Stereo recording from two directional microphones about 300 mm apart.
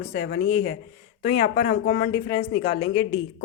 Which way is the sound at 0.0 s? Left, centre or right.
Left.